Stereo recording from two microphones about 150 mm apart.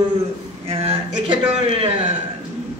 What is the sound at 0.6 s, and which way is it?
Speech, 40° right (ahead or behind).